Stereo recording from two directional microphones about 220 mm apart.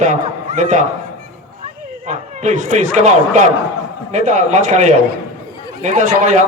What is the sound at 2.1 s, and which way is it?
A man's voice, 30° right (ahead or behind).